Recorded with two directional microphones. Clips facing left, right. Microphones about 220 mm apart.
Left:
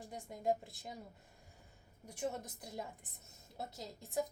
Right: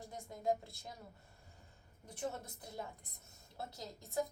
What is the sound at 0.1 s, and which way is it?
Speech, 15° left (ahead or behind).